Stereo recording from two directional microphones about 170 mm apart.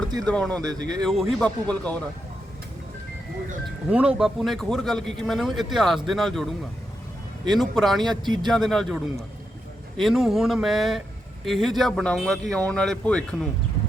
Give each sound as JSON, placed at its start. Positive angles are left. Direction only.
{"t": 0.3, "sound": "speech", "side_deg": 5}
{"t": 3.8, "sound": "speech", "side_deg": -5}
{"t": 7.5, "sound": "speech", "side_deg": 0}
{"t": 8.1, "sound": "speech", "side_deg": -25}
{"t": 8.4, "sound": "speech", "side_deg": 0}
{"t": 10.0, "sound": "speech", "side_deg": 0}